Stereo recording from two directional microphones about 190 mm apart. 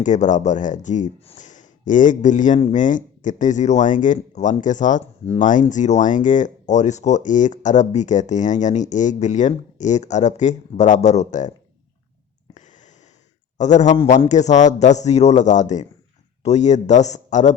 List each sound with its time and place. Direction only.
0.0 s speech: 40° left (ahead or behind)
13.6 s speech: 40° left (ahead or behind)
13.9 s speech: 30° left (ahead or behind)